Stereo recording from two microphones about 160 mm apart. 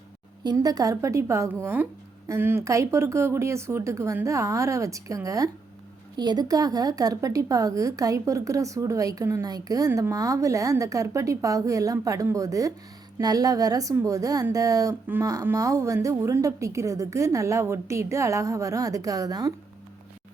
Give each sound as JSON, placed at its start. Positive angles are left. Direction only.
{"t": 0.4, "sound": "a woman's voice", "side_deg": -25}